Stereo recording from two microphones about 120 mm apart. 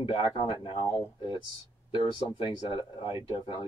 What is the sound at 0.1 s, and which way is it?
Speech, 45° left (ahead or behind).